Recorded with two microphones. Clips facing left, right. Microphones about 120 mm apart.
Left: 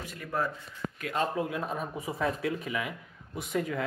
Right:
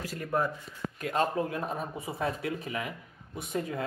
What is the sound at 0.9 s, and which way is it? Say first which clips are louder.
Speech: right 2 dB; 40° right (ahead or behind).